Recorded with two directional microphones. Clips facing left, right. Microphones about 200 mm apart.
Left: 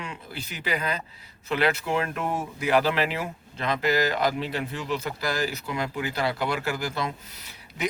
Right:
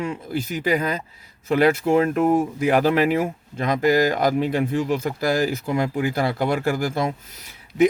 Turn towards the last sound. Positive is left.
turn(degrees=-50)  # may be behind; listen again after turning